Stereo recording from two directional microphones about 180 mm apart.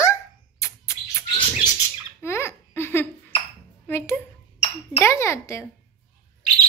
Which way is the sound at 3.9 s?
15° left (ahead or behind).